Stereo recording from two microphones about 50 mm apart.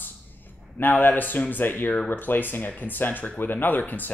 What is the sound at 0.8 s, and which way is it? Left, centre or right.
Speech, left.